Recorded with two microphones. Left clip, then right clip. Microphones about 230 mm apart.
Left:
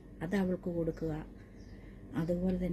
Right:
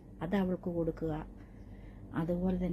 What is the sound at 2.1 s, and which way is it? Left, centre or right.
Speech, centre.